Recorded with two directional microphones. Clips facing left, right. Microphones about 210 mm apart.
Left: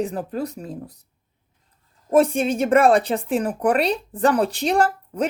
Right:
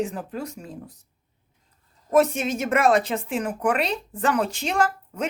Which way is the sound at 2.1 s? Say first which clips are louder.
Left 3 dB; 30° left (ahead or behind).